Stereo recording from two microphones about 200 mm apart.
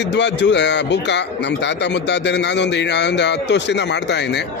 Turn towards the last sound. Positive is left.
turn(degrees=60)  # may be behind; listen again after turning